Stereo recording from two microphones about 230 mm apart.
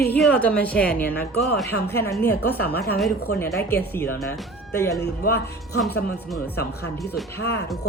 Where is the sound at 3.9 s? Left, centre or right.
Centre.